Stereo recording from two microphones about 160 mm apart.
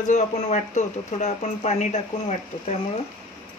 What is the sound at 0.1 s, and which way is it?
Speech, 45° left (ahead or behind).